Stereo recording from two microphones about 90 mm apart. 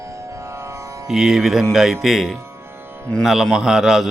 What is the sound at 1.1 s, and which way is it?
Speech, 5° right (ahead or behind).